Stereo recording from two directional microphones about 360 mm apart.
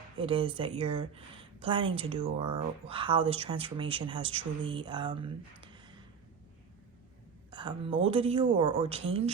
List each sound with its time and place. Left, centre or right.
0.2 s speech: centre
7.5 s speech: centre